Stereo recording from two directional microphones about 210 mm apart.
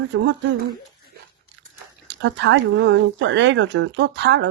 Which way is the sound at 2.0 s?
55° right (ahead or behind).